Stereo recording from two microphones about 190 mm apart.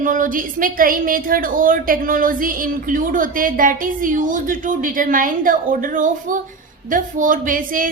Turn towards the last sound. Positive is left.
turn(degrees=-45)  # may be behind; listen again after turning